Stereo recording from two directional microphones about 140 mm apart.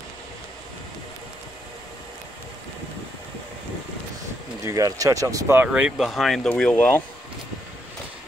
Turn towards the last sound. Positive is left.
turn(degrees=10)  # may be behind; listen again after turning